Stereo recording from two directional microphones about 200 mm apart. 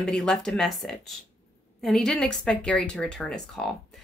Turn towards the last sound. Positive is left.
turn(degrees=0)  # may be behind; listen again after turning